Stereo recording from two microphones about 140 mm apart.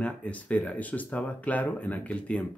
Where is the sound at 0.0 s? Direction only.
10° left (ahead or behind).